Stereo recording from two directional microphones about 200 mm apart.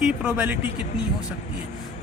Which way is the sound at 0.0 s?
5° right (ahead or behind).